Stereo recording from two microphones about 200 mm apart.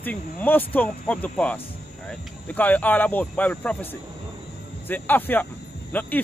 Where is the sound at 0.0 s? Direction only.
10° left (ahead or behind).